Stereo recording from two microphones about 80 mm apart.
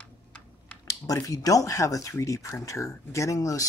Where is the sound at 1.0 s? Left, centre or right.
Left.